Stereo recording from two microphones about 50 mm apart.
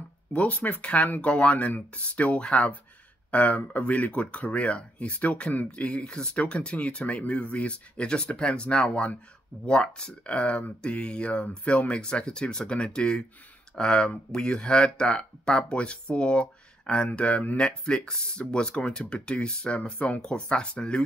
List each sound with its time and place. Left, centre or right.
0.3 s speech: left
17.6 s speech: centre